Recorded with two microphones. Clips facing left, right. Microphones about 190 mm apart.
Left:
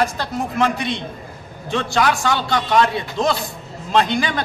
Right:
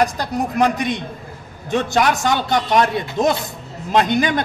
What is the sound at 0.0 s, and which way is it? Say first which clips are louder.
Speech: right 2 dB; 15° right (ahead or behind).